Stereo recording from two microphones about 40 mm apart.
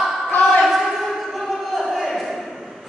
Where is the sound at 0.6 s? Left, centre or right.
Centre.